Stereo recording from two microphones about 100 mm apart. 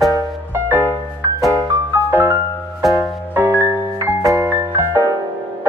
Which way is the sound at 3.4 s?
20° right (ahead or behind).